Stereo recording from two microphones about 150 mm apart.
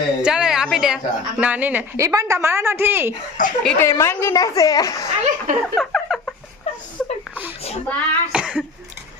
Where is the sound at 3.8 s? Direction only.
20° left (ahead or behind).